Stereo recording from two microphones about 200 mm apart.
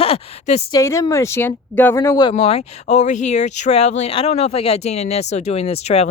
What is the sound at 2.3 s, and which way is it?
Speech, 30° left (ahead or behind).